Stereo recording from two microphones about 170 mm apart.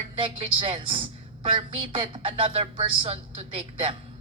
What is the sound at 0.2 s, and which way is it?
A woman's voice, 30° right (ahead or behind).